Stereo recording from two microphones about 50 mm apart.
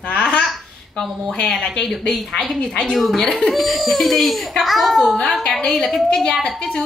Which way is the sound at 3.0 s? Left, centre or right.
Centre.